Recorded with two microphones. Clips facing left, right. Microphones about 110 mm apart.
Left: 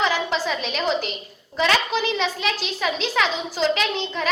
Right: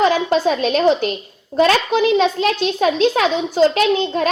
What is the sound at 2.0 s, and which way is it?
A child's voice, 55° right (ahead or behind).